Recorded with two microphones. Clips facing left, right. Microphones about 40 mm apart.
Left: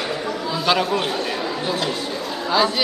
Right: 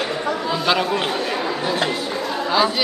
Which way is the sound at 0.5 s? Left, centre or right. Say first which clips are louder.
Left 1 dB; centre.